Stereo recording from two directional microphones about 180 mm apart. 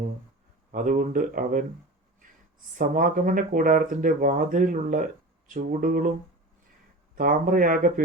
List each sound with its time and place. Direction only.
0.7 s speech: 50° right (ahead or behind)
2.7 s speech: 50° right (ahead or behind)
7.2 s speech: 50° right (ahead or behind)